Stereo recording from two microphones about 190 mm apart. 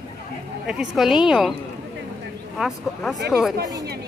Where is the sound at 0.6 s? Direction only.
5° right (ahead or behind).